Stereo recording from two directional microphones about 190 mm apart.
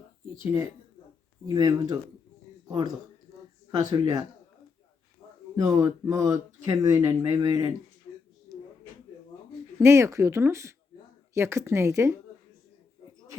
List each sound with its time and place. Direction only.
1.5 s speech: 20° right (ahead or behind)
5.5 s speech: 15° right (ahead or behind)
8.1 s a sound: 30° left (ahead or behind)
9.7 s speech: 15° right (ahead or behind)